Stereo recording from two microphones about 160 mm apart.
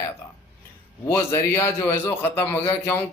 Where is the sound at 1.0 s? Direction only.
15° left (ahead or behind).